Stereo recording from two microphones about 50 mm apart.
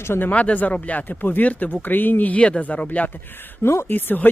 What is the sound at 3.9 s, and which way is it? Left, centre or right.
Speech, left.